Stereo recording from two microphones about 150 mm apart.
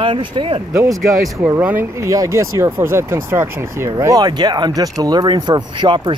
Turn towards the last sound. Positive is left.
turn(degrees=-30)  # may be behind; listen again after turning